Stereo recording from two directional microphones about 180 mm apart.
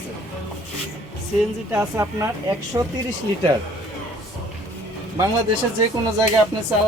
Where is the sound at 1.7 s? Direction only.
15° right (ahead or behind).